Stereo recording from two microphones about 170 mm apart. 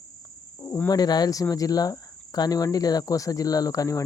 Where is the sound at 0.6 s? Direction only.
15° left (ahead or behind).